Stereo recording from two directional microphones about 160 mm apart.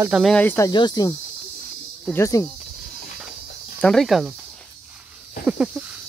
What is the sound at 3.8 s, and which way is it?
Speech, centre (ahead or behind).